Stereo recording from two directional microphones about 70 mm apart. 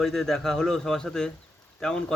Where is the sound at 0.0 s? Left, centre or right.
Centre.